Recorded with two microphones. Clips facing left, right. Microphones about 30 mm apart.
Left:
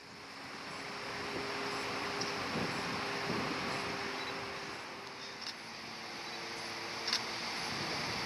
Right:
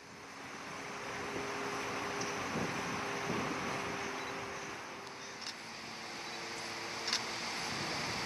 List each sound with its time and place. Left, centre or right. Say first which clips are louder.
1.0 s vehicle: even; left
7.0 s vehicle: left 1 dB; centre